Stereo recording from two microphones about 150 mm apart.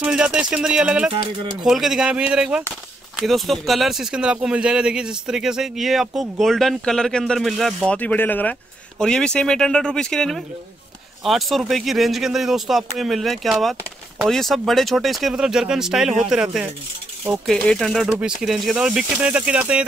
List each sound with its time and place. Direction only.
0.0 s speech: 5° right (ahead or behind)
1.1 s speech: 30° right (ahead or behind)
1.7 s speech: centre (ahead or behind)